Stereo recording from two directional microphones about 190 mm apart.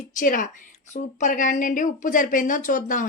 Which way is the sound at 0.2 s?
45° left (ahead or behind).